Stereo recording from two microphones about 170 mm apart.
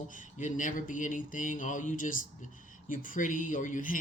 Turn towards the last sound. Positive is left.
turn(degrees=50)  # may be behind; listen again after turning